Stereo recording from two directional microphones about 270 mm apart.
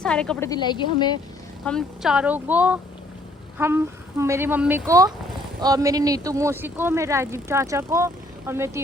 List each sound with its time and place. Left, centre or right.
0.0 s a woman's voice: centre
1.6 s a woman's voice: centre